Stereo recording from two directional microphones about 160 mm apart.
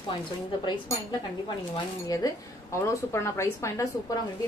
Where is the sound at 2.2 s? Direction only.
25° left (ahead or behind).